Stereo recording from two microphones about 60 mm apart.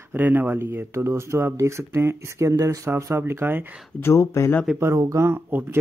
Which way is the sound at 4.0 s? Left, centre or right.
Left.